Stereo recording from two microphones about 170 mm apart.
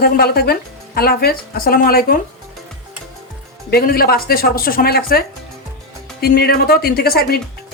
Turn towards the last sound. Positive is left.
turn(degrees=65)  # may be behind; listen again after turning